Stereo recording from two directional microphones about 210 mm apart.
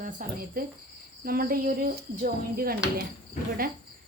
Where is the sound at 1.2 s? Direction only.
45° right (ahead or behind).